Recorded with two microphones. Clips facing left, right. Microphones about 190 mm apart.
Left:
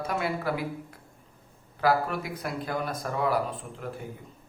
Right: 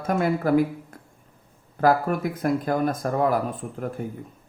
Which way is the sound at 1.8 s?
50° right (ahead or behind).